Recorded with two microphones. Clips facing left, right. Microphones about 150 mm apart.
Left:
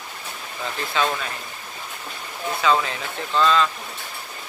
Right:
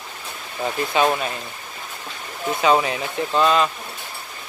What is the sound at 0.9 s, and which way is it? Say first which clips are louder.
Speech: right 4 dB; 20° right (ahead or behind).